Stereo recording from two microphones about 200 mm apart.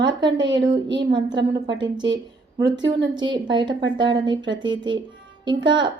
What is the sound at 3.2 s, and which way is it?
A woman's voice, 20° right (ahead or behind).